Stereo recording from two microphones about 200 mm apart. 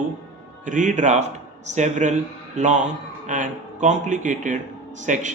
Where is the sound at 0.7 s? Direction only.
40° right (ahead or behind).